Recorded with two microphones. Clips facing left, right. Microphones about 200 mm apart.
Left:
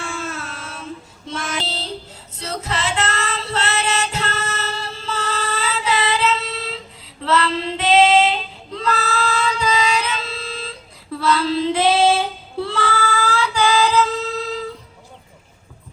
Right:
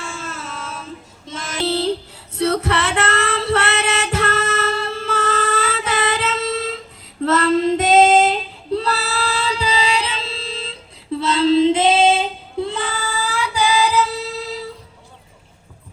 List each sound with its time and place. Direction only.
0.2 s a sound: 55° left (ahead or behind)
1.6 s female singing: 65° right (ahead or behind); by 6.7 s 45° right (ahead or behind)
7.2 s child singing: 45° right (ahead or behind); by 10.8 s 25° right (ahead or behind)
11.2 s female singing: 25° right (ahead or behind); by 14.6 s 10° right (ahead or behind)